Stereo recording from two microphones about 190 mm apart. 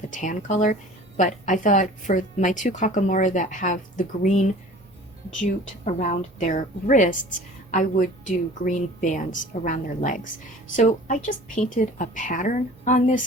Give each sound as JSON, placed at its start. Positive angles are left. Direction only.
{"t": 0.1, "sound": "a woman's voice", "side_deg": 40}
{"t": 5.8, "sound": "a woman's voice", "side_deg": 40}
{"t": 11.5, "sound": "a woman's voice", "side_deg": 40}